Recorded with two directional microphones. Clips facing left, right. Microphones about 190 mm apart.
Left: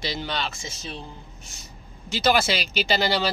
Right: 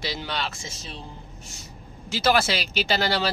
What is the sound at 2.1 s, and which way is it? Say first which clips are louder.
Speech: even; 5° right (ahead or behind).